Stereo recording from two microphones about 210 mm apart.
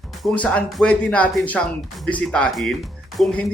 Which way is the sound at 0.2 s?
5° left (ahead or behind).